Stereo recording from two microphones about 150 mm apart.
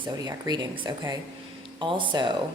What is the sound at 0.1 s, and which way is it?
Speech, 25° right (ahead or behind).